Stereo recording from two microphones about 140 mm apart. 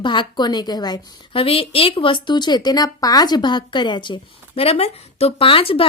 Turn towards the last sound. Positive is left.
turn(degrees=40)  # may be behind; listen again after turning